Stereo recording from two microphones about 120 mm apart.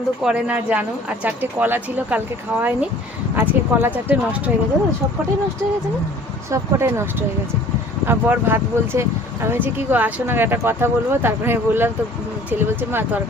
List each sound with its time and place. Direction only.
0.2 s speech: 10° right (ahead or behind)
6.5 s speech: 25° right (ahead or behind)